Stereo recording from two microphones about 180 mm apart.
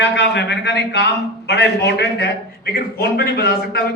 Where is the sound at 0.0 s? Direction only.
75° left (ahead or behind).